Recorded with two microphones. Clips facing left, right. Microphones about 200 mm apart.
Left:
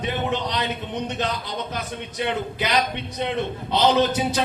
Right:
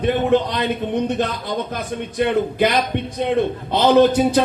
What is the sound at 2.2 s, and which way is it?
A man's voice, 50° right (ahead or behind).